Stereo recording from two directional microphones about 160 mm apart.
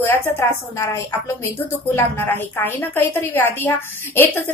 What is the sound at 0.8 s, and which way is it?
A woman's voice, 20° left (ahead or behind).